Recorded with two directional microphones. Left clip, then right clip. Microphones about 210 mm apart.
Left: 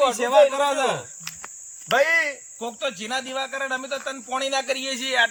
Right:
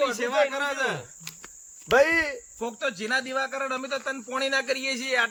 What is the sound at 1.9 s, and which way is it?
Speech, 25° right (ahead or behind).